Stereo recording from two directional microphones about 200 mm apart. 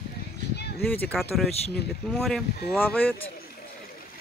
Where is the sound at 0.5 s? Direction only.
55° left (ahead or behind).